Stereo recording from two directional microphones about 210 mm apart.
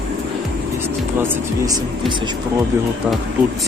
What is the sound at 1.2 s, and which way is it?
Speech, 15° right (ahead or behind).